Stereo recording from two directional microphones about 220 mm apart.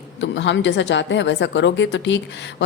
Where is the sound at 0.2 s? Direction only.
55° left (ahead or behind).